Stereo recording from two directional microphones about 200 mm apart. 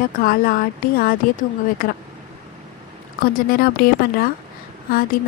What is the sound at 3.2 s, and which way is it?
A woman's voice, 45° left (ahead or behind).